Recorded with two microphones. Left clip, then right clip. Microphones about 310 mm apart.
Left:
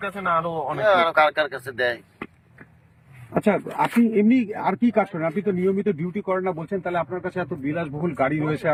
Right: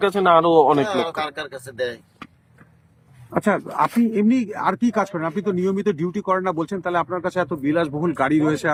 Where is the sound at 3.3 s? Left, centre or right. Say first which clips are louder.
Right 2 dB; centre.